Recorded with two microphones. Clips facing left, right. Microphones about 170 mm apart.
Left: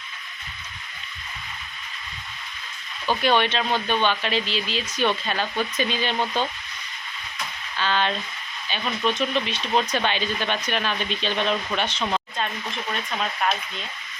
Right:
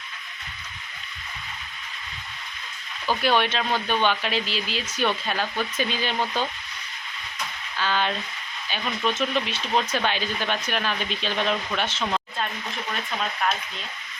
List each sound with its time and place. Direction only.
3.1 s speech: 5° right (ahead or behind)
7.8 s speech: 5° right (ahead or behind)